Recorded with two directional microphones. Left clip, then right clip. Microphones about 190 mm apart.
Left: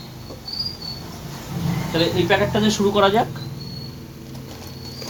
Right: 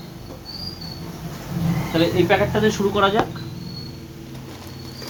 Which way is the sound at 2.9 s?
20° left (ahead or behind).